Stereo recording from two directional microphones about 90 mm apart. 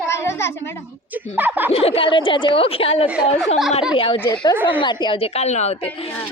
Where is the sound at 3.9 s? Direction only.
90° left.